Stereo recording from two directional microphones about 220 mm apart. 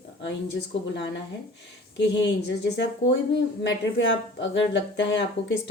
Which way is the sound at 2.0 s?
50° left (ahead or behind).